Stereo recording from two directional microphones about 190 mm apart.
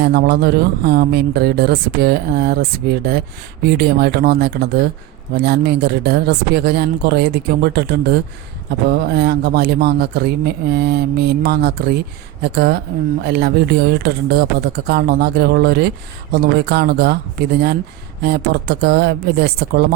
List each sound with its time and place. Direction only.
0.1 s speech: 60° right (ahead or behind)
18.2 s speech: 60° right (ahead or behind)